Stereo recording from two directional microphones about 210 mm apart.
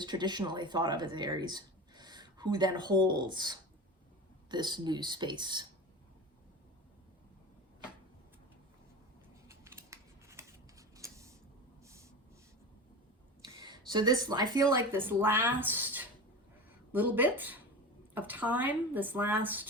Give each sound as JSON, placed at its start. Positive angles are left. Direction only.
{"t": 0.0, "sound": "speech", "side_deg": -20}
{"t": 9.5, "sound": "scissors", "side_deg": -15}
{"t": 13.4, "sound": "speech", "side_deg": -20}